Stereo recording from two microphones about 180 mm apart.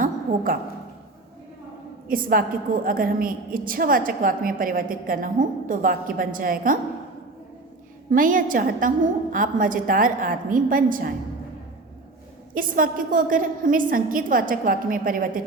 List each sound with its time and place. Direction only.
2.0 s a woman's voice: 50° right (ahead or behind)
8.1 s a woman's voice: 50° right (ahead or behind)
12.5 s a woman's voice: 50° right (ahead or behind)